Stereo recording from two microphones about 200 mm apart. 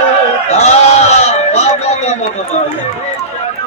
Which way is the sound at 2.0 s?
35° left (ahead or behind).